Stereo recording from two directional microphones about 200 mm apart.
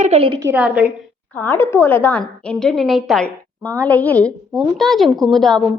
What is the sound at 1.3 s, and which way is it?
A woman's voice, 10° left (ahead or behind).